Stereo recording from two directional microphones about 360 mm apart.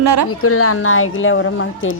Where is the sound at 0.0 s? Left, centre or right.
Right.